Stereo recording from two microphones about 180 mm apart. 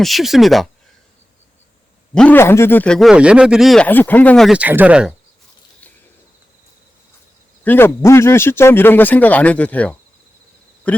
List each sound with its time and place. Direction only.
0.0 s speech: centre (ahead or behind)
2.1 s speech: 10° left (ahead or behind)
7.6 s speech: 10° left (ahead or behind)
10.9 s a sound: 10° left (ahead or behind)